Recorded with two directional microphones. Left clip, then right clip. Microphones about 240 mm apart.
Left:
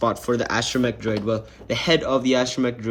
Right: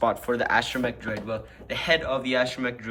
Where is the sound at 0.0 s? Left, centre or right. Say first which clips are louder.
Left 2 dB; centre.